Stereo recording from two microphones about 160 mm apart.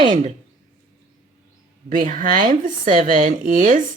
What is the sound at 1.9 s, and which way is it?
A woman's voice, 55° right (ahead or behind).